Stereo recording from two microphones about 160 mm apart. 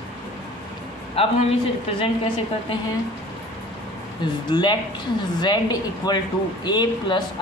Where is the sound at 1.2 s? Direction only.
40° left (ahead or behind).